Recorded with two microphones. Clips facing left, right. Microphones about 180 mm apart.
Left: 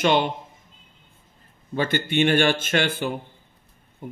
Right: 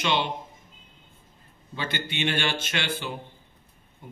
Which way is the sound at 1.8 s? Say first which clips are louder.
Left 9 dB; 50° left (ahead or behind).